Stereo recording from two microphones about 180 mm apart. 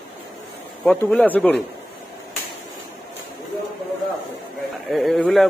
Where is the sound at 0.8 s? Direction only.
5° left (ahead or behind).